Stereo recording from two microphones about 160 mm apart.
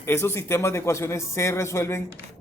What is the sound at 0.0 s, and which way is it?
Speech, 15° left (ahead or behind).